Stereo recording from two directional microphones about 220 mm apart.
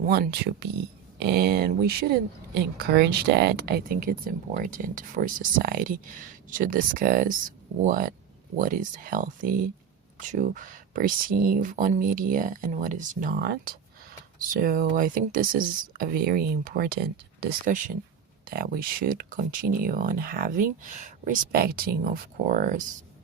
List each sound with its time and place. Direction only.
0.1 s speech: 45° right (ahead or behind)
13.4 s speech: 45° right (ahead or behind)